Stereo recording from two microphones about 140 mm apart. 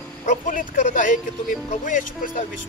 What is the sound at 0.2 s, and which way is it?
Speech, 65° left (ahead or behind).